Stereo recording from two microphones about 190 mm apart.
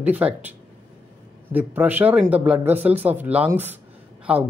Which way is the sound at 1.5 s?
10° right (ahead or behind).